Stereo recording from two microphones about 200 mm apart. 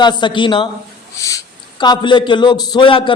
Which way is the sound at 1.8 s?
20° left (ahead or behind).